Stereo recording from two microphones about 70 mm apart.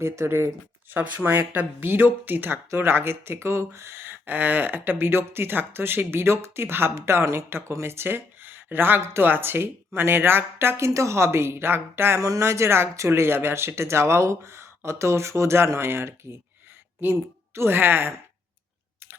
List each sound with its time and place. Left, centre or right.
0.0 s speech: right
12.2 s a woman's voice: right